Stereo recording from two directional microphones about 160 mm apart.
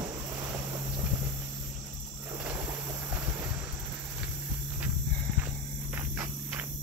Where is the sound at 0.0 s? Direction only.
20° right (ahead or behind).